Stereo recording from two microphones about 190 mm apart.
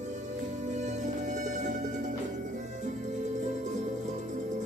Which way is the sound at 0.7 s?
40° right (ahead or behind).